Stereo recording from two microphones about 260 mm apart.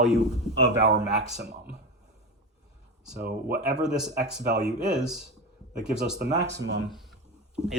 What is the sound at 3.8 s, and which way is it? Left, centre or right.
Speech, centre.